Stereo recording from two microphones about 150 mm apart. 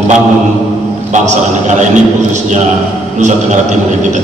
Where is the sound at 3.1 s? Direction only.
55° right (ahead or behind).